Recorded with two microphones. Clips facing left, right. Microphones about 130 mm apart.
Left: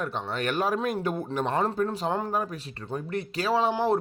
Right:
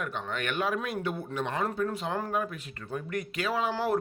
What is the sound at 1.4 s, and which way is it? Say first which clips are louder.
Speech: left 4 dB; 30° left (ahead or behind).